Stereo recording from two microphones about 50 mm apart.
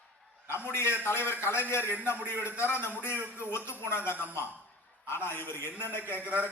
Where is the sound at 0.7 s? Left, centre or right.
Left.